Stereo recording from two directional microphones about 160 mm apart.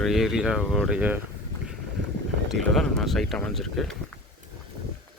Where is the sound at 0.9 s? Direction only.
10° right (ahead or behind).